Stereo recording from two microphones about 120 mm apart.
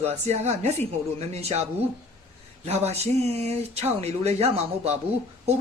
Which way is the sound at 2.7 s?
65° right (ahead or behind).